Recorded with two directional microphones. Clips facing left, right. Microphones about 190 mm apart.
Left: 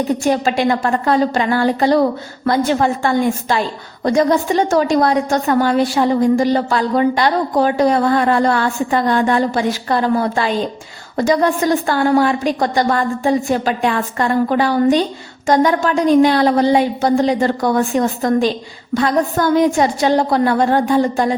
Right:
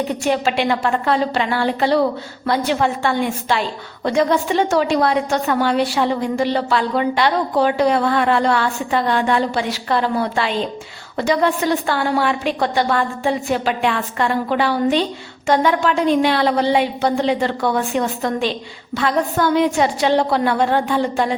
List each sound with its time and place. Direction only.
0.3 s a woman's voice: 40° left (ahead or behind)